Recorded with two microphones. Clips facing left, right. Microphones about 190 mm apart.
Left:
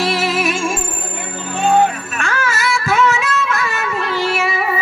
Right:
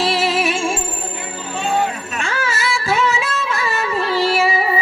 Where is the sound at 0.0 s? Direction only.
30° right (ahead or behind).